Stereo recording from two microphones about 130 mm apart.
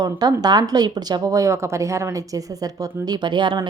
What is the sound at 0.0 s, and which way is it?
A woman's voice, 30° right (ahead or behind).